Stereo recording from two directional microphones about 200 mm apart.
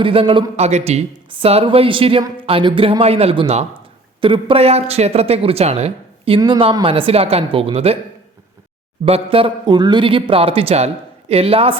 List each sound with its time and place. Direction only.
0.0 s speech: 25° right (ahead or behind)
9.0 s speech: 30° right (ahead or behind)